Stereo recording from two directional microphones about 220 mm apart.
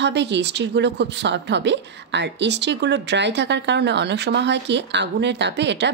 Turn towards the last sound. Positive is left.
turn(degrees=-50)  # may be behind; listen again after turning